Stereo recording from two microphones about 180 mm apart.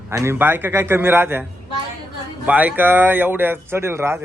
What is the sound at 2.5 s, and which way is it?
Speech, 10° right (ahead or behind).